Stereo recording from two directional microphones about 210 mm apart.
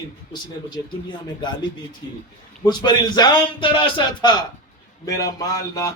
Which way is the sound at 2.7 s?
20° left (ahead or behind).